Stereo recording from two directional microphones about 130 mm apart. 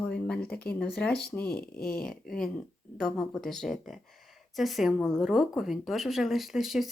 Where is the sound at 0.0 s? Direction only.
10° left (ahead or behind).